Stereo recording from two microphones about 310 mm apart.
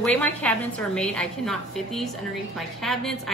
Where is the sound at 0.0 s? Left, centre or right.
Centre.